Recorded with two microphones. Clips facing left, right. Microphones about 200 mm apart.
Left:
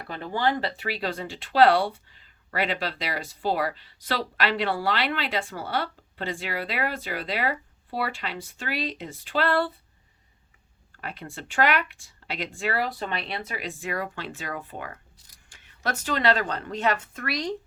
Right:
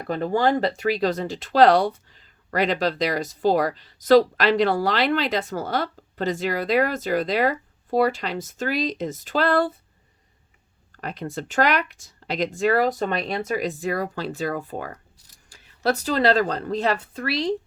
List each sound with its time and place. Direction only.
0.0 s speech: 45° right (ahead or behind)
11.0 s speech: 40° right (ahead or behind)